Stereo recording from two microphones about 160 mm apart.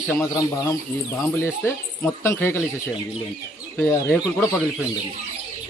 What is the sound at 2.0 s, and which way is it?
Speech, 15° left (ahead or behind).